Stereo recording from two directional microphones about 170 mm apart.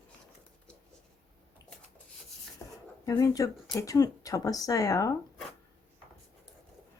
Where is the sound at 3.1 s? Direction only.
20° left (ahead or behind).